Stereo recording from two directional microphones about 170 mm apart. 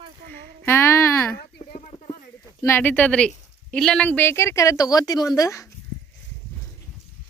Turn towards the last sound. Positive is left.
turn(degrees=20)  # may be behind; listen again after turning